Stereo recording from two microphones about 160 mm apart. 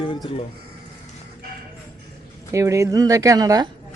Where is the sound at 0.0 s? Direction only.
30° left (ahead or behind).